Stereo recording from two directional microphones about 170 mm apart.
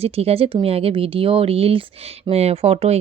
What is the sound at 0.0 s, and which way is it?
Speech, 35° right (ahead or behind).